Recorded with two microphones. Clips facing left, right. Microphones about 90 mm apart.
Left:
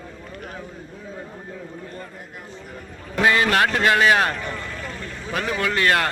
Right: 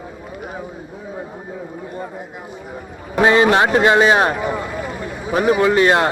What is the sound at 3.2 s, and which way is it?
A man's voice, 25° right (ahead or behind).